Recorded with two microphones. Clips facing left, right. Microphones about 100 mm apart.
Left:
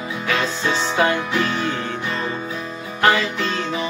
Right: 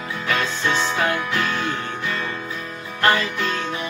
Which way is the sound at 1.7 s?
Centre (ahead or behind).